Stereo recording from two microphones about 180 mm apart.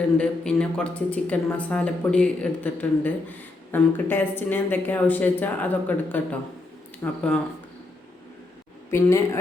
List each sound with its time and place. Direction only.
0.2 s speech: 5° left (ahead or behind)
8.9 s speech: 15° left (ahead or behind)